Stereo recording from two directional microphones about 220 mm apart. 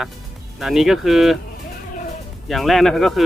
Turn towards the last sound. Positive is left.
turn(degrees=0)  # may be behind; listen again after turning